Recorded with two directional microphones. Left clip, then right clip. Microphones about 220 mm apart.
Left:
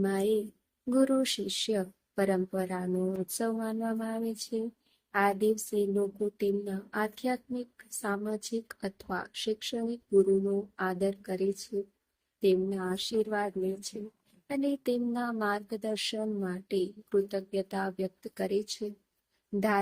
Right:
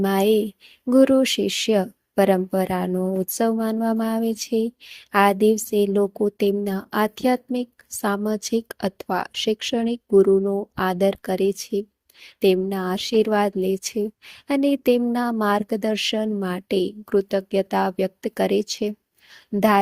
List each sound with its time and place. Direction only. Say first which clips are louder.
0.0 s speech: right 10 dB; 35° right (ahead or behind)
10.8 s speech: right 11 dB; 35° right (ahead or behind)